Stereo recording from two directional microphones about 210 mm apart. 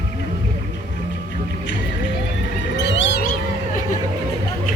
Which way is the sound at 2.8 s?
55° left (ahead or behind).